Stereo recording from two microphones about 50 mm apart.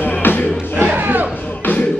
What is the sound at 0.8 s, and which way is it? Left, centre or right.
Music, right.